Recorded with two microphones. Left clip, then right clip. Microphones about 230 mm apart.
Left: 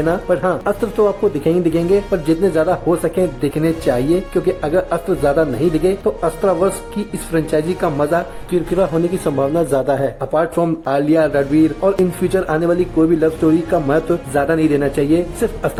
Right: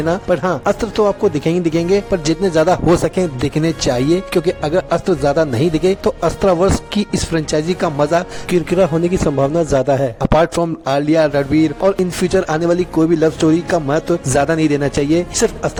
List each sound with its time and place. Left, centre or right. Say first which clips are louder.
0.0 s speech: even; right